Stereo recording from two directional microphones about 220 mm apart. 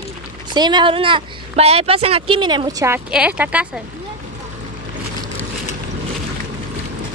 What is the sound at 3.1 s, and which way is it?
Speech, 5° right (ahead or behind).